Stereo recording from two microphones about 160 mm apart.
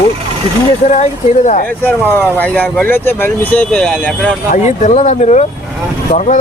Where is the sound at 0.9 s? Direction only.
45° left (ahead or behind).